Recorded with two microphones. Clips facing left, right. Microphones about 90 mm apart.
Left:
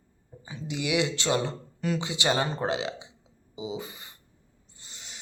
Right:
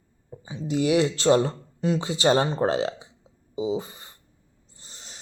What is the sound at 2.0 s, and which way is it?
Speech, 40° right (ahead or behind).